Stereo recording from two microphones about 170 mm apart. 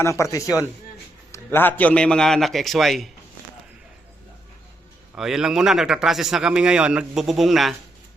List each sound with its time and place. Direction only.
0.2 s a man's voice: 20° left (ahead or behind); by 3.1 s centre (ahead or behind)
5.1 s speech: centre (ahead or behind)